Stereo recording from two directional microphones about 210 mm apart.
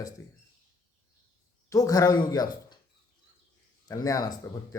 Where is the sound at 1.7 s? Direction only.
15° left (ahead or behind).